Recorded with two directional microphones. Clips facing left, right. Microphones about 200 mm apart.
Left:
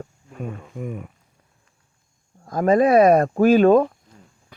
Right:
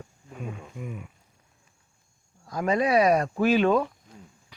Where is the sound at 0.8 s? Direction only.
45° left (ahead or behind).